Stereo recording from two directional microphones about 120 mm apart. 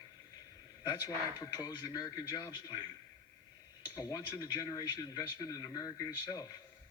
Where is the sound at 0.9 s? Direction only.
30° left (ahead or behind).